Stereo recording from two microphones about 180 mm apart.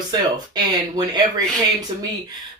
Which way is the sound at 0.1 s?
25° right (ahead or behind).